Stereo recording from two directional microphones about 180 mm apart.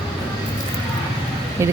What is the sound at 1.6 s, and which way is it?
Speech, 15° right (ahead or behind).